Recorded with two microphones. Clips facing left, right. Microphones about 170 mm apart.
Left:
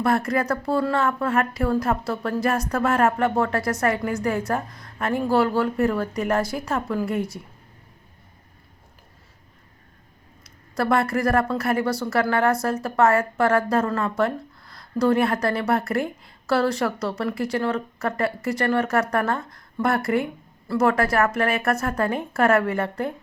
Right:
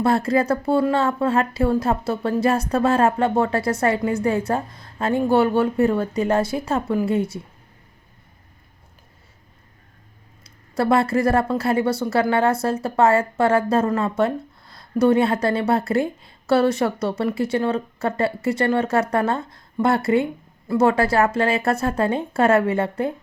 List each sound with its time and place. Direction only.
0.0 s speech: 25° right (ahead or behind)
10.4 s speech: 25° right (ahead or behind)